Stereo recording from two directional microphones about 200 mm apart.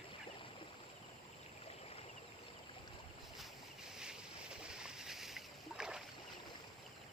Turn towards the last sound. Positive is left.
turn(degrees=-5)  # may be behind; listen again after turning